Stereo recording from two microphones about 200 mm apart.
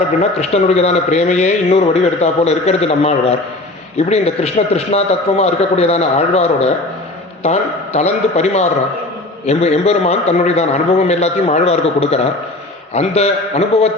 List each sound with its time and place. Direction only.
0.3 s a man's voice: 35° left (ahead or behind)